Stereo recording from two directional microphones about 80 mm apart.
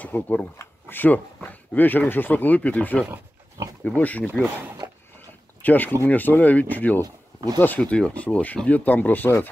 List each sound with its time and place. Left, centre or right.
0.0 s speech: left
4.8 s a sound: right
5.6 s speech: left